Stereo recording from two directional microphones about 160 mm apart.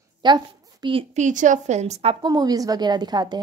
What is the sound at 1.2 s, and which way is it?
A woman's voice, 50° right (ahead or behind).